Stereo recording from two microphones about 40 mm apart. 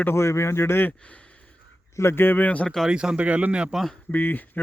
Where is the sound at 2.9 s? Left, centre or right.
Right.